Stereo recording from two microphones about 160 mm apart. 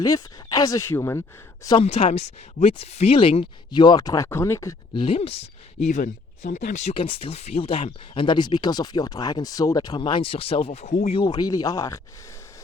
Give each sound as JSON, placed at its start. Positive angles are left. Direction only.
{"t": 0.0, "sound": "speech", "side_deg": 20}
{"t": 1.8, "sound": "speech", "side_deg": 40}
{"t": 4.9, "sound": "speech", "side_deg": 35}
{"t": 5.9, "sound": "speech", "side_deg": 50}
{"t": 6.9, "sound": "speech", "side_deg": 35}
{"t": 11.1, "sound": "speech", "side_deg": 30}